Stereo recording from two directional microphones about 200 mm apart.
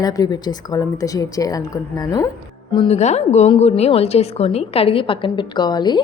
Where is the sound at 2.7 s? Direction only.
30° left (ahead or behind).